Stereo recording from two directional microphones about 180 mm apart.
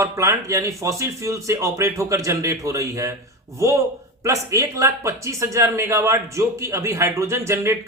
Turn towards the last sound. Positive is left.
turn(degrees=-15)  # may be behind; listen again after turning